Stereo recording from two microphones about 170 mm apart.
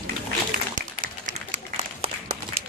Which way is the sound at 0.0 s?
55° right (ahead or behind).